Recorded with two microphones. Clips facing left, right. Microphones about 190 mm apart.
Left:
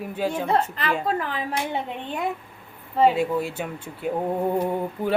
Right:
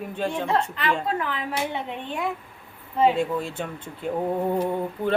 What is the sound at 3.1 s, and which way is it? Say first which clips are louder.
Speech: left 2 dB; 5° left (ahead or behind).